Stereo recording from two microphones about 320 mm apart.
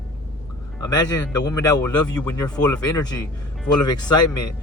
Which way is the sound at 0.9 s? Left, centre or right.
Centre.